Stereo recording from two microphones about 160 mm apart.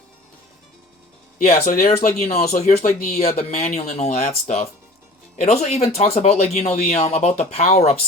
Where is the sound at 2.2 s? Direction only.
45° left (ahead or behind).